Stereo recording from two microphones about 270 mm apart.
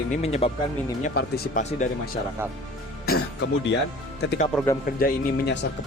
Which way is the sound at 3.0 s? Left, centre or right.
Left.